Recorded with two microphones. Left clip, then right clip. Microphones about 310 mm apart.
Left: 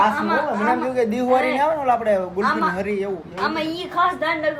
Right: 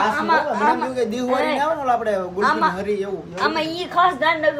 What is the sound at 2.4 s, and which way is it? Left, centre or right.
Speech, right.